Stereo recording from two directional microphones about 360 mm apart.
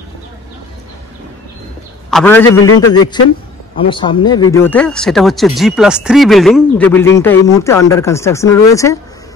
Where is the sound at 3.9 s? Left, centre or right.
Centre.